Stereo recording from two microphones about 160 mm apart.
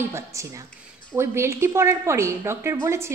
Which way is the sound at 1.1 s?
15° right (ahead or behind).